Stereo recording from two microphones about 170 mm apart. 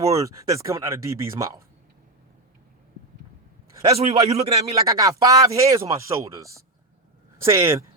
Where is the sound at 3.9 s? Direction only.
35° right (ahead or behind).